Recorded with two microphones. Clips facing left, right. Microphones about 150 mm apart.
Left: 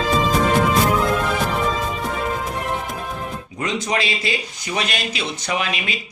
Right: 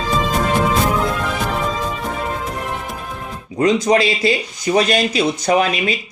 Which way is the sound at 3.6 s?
35° right (ahead or behind).